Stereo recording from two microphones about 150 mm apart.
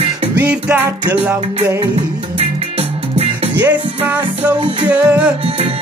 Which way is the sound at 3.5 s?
10° right (ahead or behind).